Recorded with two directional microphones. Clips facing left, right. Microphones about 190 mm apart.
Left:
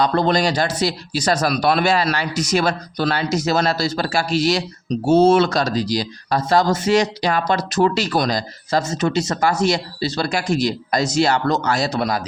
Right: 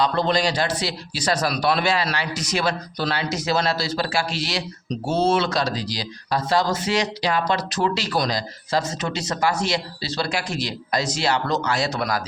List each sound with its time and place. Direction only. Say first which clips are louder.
0.0 s speech: left 3 dB; 50° left (ahead or behind); by 12.2 s 30° left (ahead or behind)